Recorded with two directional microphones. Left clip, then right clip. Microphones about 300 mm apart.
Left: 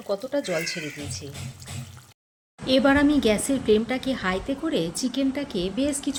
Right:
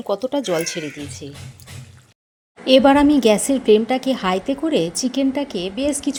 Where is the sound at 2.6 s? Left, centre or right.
Centre.